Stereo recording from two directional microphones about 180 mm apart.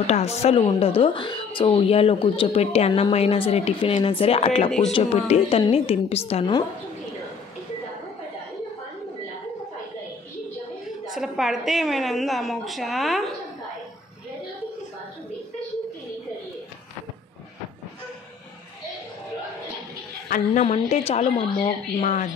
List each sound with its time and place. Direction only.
0.0 s a woman's voice: 35° left (ahead or behind)
11.1 s a woman's voice: centre (ahead or behind)
20.2 s a woman's voice: 50° left (ahead or behind)
20.6 s a woman's voice: 35° left (ahead or behind)